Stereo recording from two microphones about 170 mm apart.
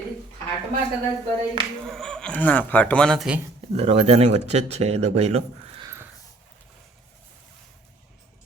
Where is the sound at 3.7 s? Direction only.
40° right (ahead or behind).